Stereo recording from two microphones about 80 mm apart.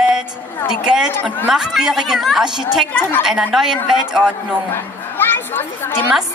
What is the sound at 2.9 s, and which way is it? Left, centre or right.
Speech, left.